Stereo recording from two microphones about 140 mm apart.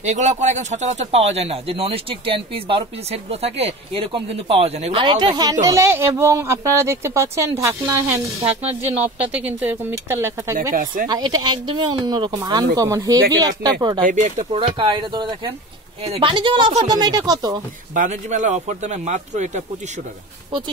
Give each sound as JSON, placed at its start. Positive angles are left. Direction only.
{"t": 0.0, "sound": "speech", "side_deg": -55}
{"t": 5.0, "sound": "speech", "side_deg": -30}
{"t": 10.7, "sound": "speech", "side_deg": -75}
{"t": 11.1, "sound": "speech", "side_deg": -30}
{"t": 14.0, "sound": "a man's voice", "side_deg": -65}
{"t": 14.5, "sound": "speech", "side_deg": -40}
{"t": 17.9, "sound": "a man's voice", "side_deg": -60}